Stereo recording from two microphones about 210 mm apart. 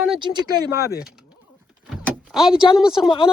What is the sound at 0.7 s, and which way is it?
Speech, 45° left (ahead or behind).